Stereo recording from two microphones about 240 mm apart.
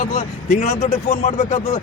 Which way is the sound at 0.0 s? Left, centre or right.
Left.